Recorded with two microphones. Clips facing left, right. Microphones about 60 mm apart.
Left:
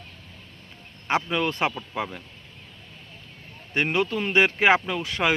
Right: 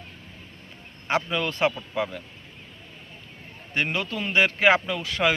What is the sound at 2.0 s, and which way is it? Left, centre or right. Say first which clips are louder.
Speech: right 2 dB; centre.